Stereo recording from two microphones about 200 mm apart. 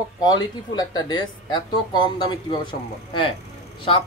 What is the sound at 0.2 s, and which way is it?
Speech, 20° left (ahead or behind).